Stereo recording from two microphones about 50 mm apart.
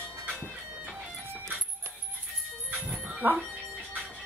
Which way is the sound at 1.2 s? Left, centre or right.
Right.